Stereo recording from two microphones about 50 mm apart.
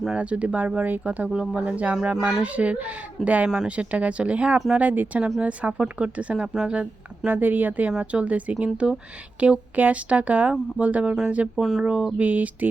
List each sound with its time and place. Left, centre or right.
0.2 s speech: right
2.1 s speech: centre
2.4 s a woman's voice: right
6.3 s speech: centre
7.3 s a woman's voice: right